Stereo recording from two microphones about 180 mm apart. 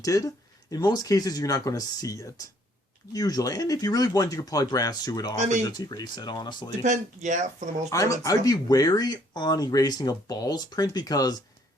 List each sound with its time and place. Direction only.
0.0 s speech: 20° left (ahead or behind)
5.4 s speech: 40° right (ahead or behind)
5.6 s speech: 20° left (ahead or behind)
6.7 s speech: 40° right (ahead or behind)
7.9 s speech: 20° left (ahead or behind)